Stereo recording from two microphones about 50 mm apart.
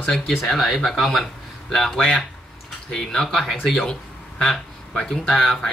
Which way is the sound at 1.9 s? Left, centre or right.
Centre.